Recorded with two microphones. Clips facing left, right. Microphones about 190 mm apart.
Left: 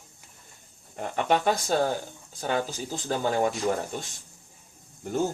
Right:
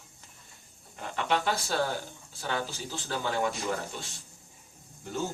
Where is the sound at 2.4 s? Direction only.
45° left (ahead or behind).